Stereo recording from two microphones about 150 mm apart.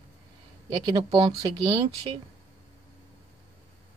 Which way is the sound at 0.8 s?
30° right (ahead or behind).